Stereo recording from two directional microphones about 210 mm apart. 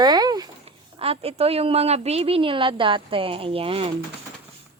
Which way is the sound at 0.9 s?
25° right (ahead or behind).